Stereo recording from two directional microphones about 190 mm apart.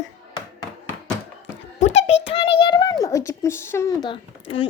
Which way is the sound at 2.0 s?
30° left (ahead or behind).